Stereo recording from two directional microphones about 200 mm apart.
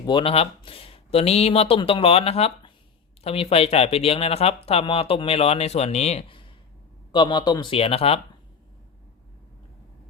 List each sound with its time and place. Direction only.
0.0 s speech: 25° left (ahead or behind)